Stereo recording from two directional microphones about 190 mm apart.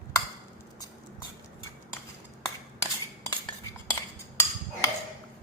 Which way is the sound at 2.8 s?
15° left (ahead or behind).